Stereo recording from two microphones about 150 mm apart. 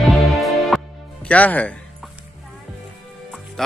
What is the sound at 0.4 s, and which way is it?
Music, centre (ahead or behind).